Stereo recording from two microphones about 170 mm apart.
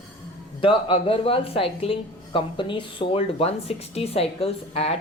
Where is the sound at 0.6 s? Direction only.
30° left (ahead or behind).